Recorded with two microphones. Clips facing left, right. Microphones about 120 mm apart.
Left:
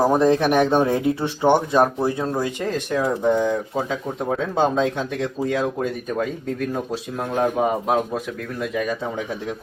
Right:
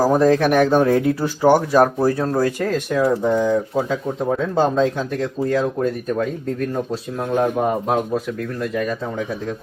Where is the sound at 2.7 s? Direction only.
5° right (ahead or behind).